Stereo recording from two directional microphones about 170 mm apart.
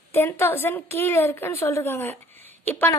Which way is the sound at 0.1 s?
15° left (ahead or behind).